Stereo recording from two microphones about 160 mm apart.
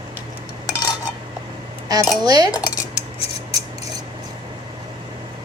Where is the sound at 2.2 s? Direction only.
25° right (ahead or behind).